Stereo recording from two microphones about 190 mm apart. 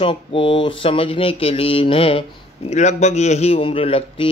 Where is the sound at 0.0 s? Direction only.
30° left (ahead or behind).